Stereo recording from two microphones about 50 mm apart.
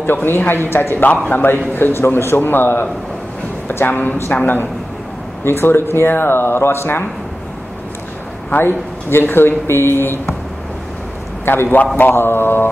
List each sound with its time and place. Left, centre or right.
0.0 s speech: left
1.0 s a man's voice: left
1.8 s a man's voice: left
5.4 s speech: left
8.5 s speech: left
11.4 s speech: left